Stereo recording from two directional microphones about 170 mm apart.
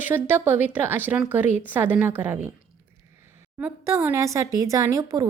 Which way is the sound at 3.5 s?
15° right (ahead or behind).